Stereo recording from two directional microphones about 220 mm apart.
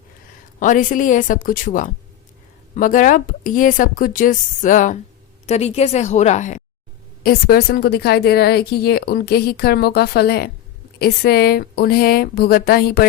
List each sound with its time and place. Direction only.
0.6 s a woman's voice: 35° left (ahead or behind)